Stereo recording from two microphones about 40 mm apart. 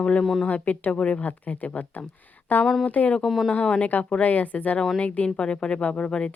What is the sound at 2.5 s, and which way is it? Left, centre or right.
Speech, left.